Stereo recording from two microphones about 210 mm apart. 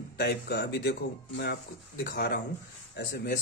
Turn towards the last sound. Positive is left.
turn(degrees=50)  # may be behind; listen again after turning